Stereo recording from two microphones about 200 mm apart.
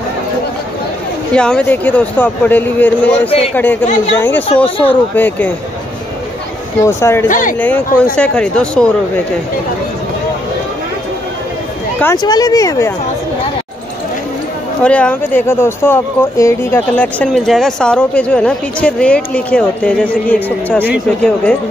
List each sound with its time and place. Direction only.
1.3 s a man's voice: 5° left (ahead or behind)
6.8 s a man's voice: 15° left (ahead or behind)
7.2 s speech: 40° left (ahead or behind)
7.5 s speech: 10° left (ahead or behind)
12.0 s a man's voice: 15° left (ahead or behind)
14.8 s a man's voice: 5° left (ahead or behind)